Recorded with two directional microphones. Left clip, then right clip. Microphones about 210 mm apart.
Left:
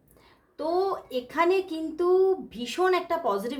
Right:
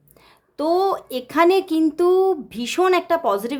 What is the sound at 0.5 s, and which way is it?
A woman's voice, 45° right (ahead or behind).